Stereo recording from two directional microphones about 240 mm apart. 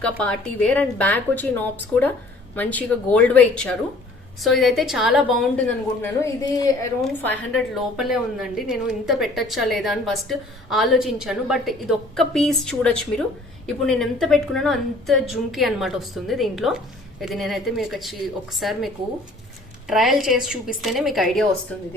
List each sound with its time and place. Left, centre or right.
0.2 s a woman's voice: centre
7.0 s a woman's voice: centre
19.9 s a woman's voice: centre